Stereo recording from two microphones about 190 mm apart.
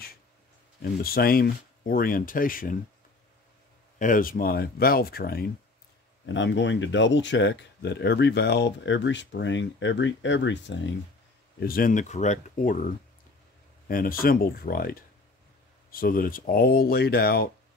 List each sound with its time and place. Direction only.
1.0 s speech: 50° left (ahead or behind)
4.0 s speech: 45° left (ahead or behind)
6.2 s speech: 75° left (ahead or behind)
11.6 s speech: 50° left (ahead or behind)
13.8 s speech: 50° left (ahead or behind)